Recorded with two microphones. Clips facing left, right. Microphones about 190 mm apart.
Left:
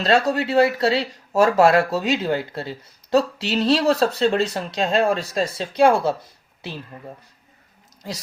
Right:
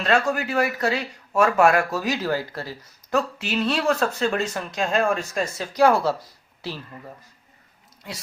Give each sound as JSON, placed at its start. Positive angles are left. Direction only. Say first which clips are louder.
{"t": 0.0, "sound": "speech", "louder": "left 3 dB", "side_deg": 35}
{"t": 3.1, "sound": "speech", "louder": "left 5 dB", "side_deg": 35}